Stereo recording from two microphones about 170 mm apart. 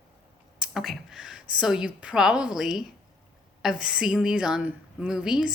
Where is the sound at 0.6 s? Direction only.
Centre (ahead or behind).